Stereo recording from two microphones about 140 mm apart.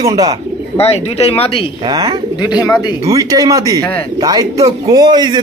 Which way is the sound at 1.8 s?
30° right (ahead or behind).